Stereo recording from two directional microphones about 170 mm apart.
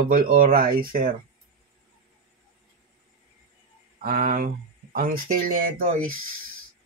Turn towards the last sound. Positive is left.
turn(degrees=-50)  # may be behind; listen again after turning